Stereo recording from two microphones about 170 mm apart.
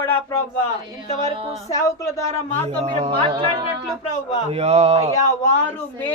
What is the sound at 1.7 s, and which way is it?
Speech, 20° left (ahead or behind).